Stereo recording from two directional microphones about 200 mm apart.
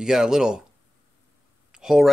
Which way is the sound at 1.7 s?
5° right (ahead or behind).